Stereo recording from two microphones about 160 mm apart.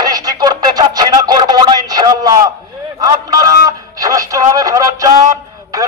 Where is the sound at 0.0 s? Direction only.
25° right (ahead or behind).